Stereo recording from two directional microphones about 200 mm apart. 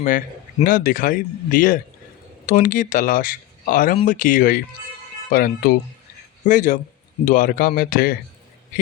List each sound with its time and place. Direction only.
0.0 s speech: 40° left (ahead or behind)